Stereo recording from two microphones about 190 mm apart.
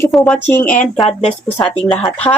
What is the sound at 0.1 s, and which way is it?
Speech, centre (ahead or behind).